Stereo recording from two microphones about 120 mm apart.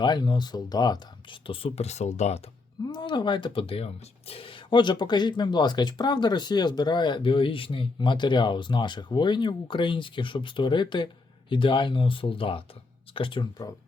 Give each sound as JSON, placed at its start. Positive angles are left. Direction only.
{"t": 0.0, "sound": "speech", "side_deg": 35}
{"t": 1.5, "sound": "speech", "side_deg": 50}
{"t": 2.8, "sound": "speech", "side_deg": 35}